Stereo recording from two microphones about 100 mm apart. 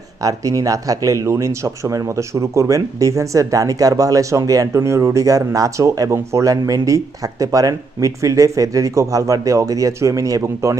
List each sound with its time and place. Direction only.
0.2 s speech: 35° right (ahead or behind)